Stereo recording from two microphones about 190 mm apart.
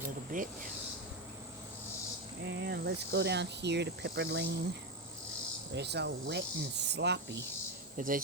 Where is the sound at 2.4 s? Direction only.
65° right (ahead or behind).